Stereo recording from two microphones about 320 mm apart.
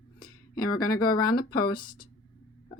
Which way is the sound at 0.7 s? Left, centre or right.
Centre.